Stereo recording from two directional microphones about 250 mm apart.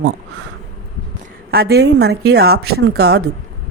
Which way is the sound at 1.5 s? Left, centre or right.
Right.